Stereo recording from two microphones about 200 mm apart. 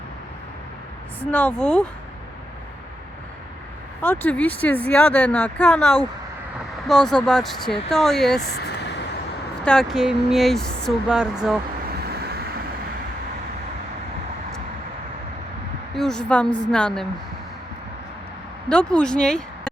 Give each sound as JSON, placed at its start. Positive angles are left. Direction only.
{"t": 1.2, "sound": "speech", "side_deg": 10}
{"t": 4.0, "sound": "speech", "side_deg": 10}
{"t": 8.4, "sound": "vehicle", "side_deg": 55}
{"t": 9.6, "sound": "speech", "side_deg": 0}
{"t": 11.9, "sound": "vehicle", "side_deg": -50}
{"t": 16.0, "sound": "speech", "side_deg": 5}
{"t": 18.7, "sound": "speech", "side_deg": 5}